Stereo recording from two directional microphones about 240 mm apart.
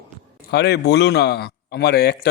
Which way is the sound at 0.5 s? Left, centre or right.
Left.